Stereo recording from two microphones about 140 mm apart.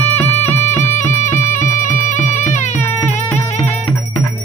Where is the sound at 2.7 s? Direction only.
15° left (ahead or behind).